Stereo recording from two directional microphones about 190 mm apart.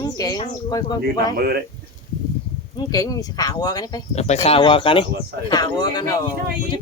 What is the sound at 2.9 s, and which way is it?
Speech, 20° left (ahead or behind).